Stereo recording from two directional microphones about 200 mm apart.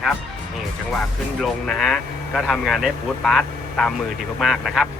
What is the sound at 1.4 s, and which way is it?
Speech, 5° left (ahead or behind).